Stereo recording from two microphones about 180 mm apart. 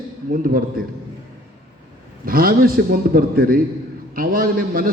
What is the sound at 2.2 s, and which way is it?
A man's voice, 55° right (ahead or behind).